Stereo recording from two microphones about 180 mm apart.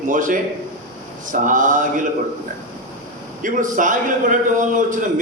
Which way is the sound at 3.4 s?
45° right (ahead or behind).